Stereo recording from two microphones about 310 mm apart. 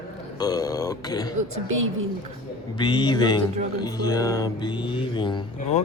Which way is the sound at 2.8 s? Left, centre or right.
Centre.